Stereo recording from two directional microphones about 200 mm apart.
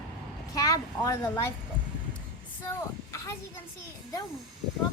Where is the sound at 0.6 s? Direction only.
15° left (ahead or behind).